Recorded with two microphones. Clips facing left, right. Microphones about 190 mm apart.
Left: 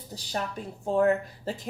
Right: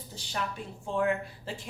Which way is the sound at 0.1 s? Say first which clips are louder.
Left 3 dB; 40° left (ahead or behind).